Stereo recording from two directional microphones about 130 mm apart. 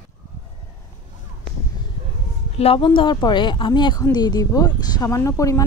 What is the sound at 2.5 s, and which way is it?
A woman's voice, 45° left (ahead or behind).